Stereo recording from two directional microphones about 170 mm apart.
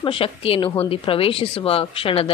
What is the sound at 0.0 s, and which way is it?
A woman's voice, 30° left (ahead or behind).